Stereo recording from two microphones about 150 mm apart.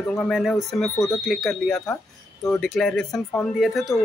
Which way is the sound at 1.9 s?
20° left (ahead or behind).